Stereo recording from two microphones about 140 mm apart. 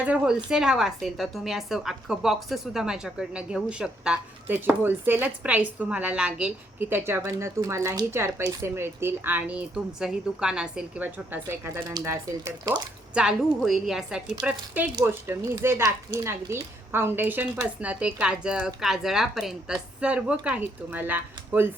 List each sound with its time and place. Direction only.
0.0 s a woman's voice: 10° right (ahead or behind)
13.1 s a woman's voice: 5° right (ahead or behind)
14.4 s speech: 30° right (ahead or behind)
15.0 s a woman's voice: 15° right (ahead or behind)